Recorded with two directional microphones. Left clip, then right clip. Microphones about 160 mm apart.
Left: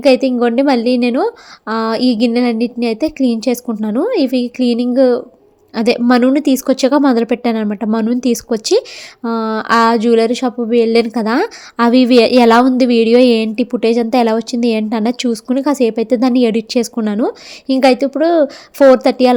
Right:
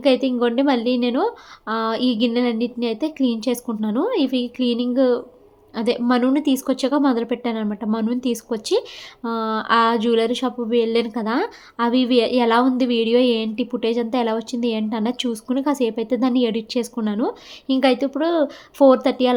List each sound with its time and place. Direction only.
0.0 s speech: 35° left (ahead or behind)